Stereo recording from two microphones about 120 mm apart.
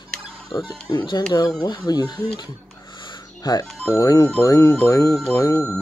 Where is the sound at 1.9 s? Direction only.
35° left (ahead or behind).